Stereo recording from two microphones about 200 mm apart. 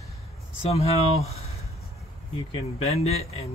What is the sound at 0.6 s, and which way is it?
Speech, 30° left (ahead or behind).